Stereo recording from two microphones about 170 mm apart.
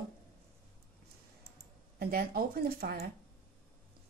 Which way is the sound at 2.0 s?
60° right (ahead or behind).